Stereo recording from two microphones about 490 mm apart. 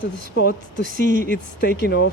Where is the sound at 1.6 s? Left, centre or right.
Left.